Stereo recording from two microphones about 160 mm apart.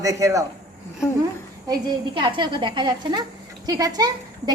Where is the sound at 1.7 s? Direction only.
30° right (ahead or behind).